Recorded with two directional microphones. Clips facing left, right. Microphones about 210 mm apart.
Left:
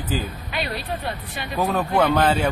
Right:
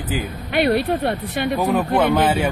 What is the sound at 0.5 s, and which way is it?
Speech, 65° right (ahead or behind).